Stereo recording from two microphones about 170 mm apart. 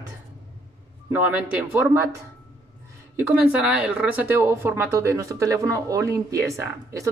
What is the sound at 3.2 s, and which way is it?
A woman's voice, 10° right (ahead or behind).